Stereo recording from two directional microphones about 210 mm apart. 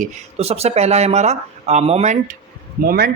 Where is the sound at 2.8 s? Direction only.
45° right (ahead or behind).